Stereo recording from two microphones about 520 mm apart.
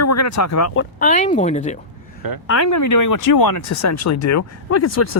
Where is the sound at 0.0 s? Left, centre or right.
Left; by 1.8 s centre.